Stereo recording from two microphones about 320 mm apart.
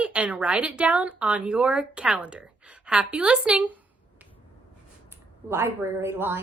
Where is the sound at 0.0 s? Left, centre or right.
Centre.